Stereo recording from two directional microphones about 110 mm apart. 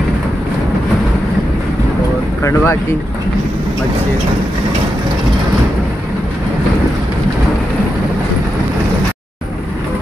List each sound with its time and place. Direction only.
2.4 s speech: 25° left (ahead or behind)